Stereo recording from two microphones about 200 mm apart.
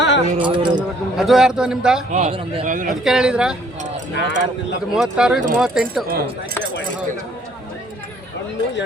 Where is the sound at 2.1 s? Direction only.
30° right (ahead or behind).